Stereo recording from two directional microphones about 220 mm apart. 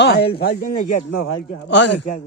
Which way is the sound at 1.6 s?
55° left (ahead or behind).